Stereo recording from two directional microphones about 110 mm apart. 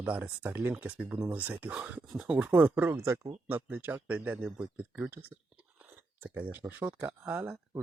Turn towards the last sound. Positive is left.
turn(degrees=-15)  # may be behind; listen again after turning